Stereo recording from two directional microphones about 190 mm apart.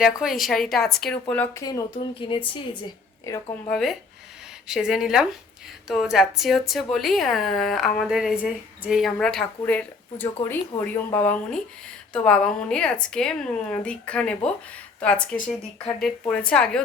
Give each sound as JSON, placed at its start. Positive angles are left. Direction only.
{"t": 0.2, "sound": "speech", "side_deg": 0}
{"t": 2.2, "sound": "a woman's voice", "side_deg": 30}
{"t": 3.3, "sound": "speech", "side_deg": 15}
{"t": 3.7, "sound": "speech", "side_deg": 0}